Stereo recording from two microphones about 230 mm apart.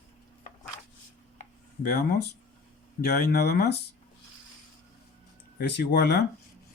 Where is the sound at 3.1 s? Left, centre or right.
Left.